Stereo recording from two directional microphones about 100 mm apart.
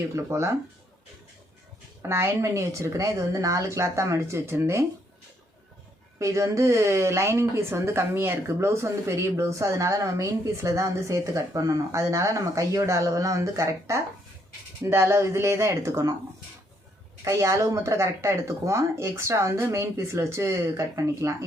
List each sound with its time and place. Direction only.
0.3 s speech: 25° right (ahead or behind)
2.0 s speech: 25° right (ahead or behind)
6.1 s speech: 30° right (ahead or behind)
17.2 s speech: 35° right (ahead or behind)